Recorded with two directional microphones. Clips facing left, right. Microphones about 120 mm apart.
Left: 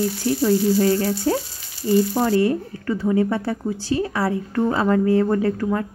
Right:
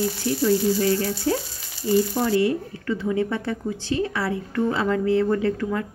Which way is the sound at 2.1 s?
45° left (ahead or behind).